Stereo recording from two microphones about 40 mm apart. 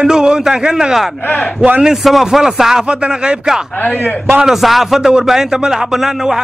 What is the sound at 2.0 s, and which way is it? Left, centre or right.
Speech, centre.